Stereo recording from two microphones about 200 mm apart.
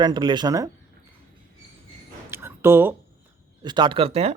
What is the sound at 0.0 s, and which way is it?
Speech, 20° right (ahead or behind).